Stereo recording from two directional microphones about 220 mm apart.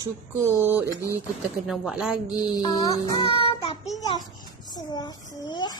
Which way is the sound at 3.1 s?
25° left (ahead or behind).